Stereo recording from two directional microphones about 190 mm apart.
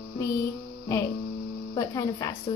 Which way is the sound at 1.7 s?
20° left (ahead or behind).